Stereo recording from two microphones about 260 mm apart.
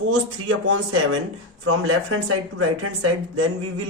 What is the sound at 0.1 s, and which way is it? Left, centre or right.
A woman's voice, right.